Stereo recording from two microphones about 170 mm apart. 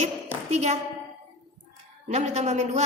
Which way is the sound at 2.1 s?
40° right (ahead or behind).